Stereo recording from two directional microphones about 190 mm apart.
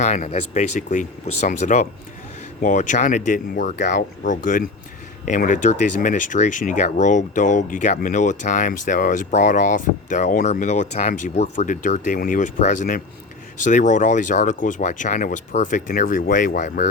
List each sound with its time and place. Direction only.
0.0 s speech: 40° left (ahead or behind)